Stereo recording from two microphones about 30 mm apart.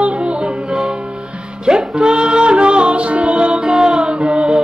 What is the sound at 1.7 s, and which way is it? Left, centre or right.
Music, right.